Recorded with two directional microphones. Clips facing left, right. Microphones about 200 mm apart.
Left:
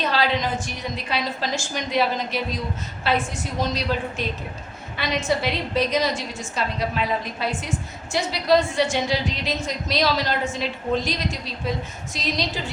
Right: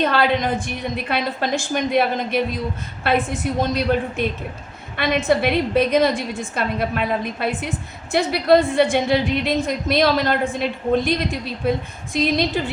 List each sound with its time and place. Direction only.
0.0 s a woman's voice: 55° right (ahead or behind)